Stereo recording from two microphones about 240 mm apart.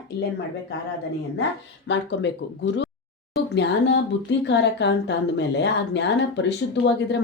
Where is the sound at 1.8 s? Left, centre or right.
Left.